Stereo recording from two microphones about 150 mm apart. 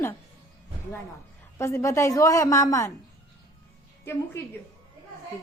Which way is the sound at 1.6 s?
20° left (ahead or behind).